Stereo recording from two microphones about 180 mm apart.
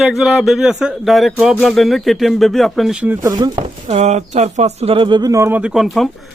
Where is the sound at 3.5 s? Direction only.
40° right (ahead or behind).